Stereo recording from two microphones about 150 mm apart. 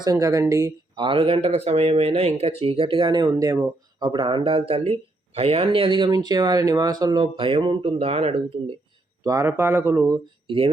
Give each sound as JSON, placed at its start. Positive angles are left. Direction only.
{"t": 0.0, "sound": "speech", "side_deg": -25}
{"t": 1.0, "sound": "speech", "side_deg": -35}
{"t": 9.2, "sound": "speech", "side_deg": -20}
{"t": 10.4, "sound": "speech", "side_deg": -35}